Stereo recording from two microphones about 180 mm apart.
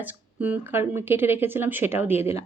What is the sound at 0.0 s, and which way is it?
Speech, 10° right (ahead or behind).